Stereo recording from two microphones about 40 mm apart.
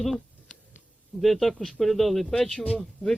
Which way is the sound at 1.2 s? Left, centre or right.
Centre.